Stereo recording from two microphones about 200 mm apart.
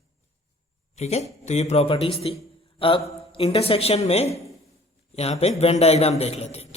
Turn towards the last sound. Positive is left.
turn(degrees=30)  # may be behind; listen again after turning